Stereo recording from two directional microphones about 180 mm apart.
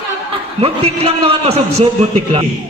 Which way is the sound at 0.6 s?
35° right (ahead or behind).